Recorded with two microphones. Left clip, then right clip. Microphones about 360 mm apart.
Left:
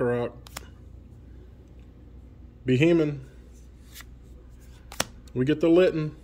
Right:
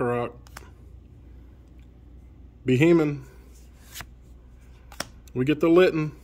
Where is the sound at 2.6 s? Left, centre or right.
Centre.